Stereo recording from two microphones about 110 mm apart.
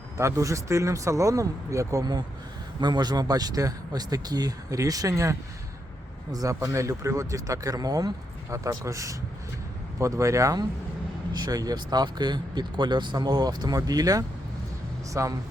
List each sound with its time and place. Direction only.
0.2 s speech: 25° right (ahead or behind)